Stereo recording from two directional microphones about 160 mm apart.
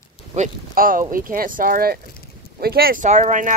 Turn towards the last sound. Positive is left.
turn(degrees=-50)  # may be behind; listen again after turning